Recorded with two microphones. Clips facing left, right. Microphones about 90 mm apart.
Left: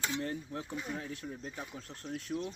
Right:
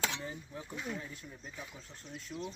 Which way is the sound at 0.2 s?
70° left (ahead or behind).